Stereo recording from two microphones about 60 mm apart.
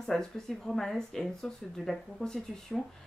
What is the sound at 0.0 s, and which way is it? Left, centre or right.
Speech, centre.